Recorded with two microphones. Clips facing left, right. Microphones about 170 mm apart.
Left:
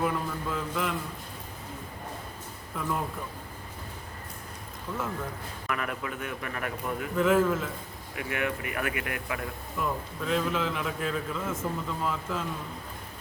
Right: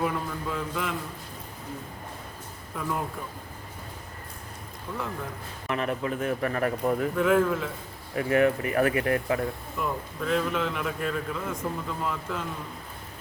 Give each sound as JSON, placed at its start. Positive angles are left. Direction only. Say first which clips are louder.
{"t": 0.0, "sound": "a man's voice", "louder": "even", "side_deg": 0}
{"t": 5.6, "sound": "speech", "louder": "right 5 dB", "side_deg": -25}
{"t": 7.2, "sound": "a man's voice", "louder": "left 1 dB", "side_deg": 5}
{"t": 8.1, "sound": "speech", "louder": "right 9 dB", "side_deg": -35}
{"t": 9.7, "sound": "a man's voice", "louder": "right 1 dB", "side_deg": 0}